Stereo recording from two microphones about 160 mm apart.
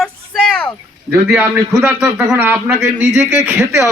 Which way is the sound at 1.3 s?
15° right (ahead or behind).